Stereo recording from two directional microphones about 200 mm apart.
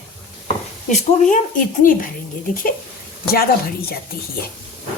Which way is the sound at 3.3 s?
50° left (ahead or behind).